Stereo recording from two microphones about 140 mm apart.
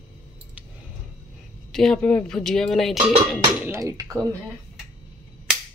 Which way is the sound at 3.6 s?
20° right (ahead or behind).